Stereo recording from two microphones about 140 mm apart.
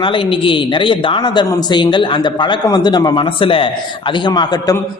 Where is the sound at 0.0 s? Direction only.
35° left (ahead or behind).